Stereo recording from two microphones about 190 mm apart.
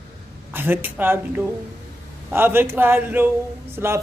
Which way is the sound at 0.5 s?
10° right (ahead or behind).